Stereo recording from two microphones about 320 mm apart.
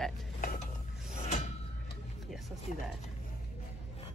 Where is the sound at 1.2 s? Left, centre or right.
Left.